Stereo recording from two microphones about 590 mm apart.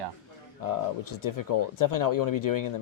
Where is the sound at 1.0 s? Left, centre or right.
Left.